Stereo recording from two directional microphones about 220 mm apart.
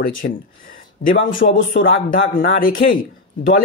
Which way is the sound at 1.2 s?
60° left (ahead or behind).